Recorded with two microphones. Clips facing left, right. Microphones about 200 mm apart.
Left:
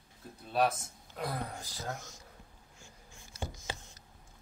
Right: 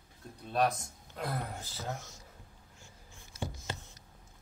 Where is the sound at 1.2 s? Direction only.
Centre (ahead or behind).